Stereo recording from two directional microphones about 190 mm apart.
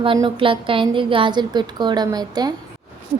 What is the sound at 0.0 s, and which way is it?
A woman's voice, 25° right (ahead or behind).